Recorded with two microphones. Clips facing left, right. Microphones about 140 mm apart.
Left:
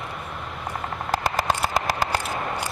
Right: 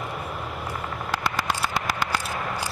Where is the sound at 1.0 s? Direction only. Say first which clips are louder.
Left 4 dB; 45° left (ahead or behind).